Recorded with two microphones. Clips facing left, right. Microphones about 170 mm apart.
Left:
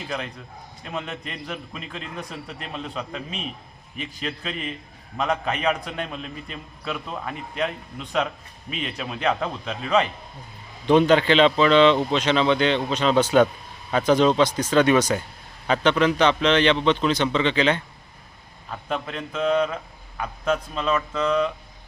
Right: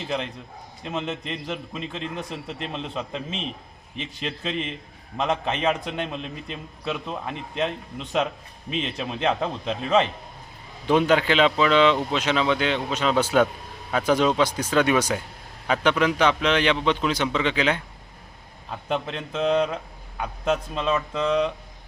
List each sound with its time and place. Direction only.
0.9 s a man's voice: 25° right (ahead or behind)
8.7 s a man's voice: 25° right (ahead or behind)
10.8 s a man's voice: 5° right (ahead or behind)
18.9 s a man's voice: 25° right (ahead or behind)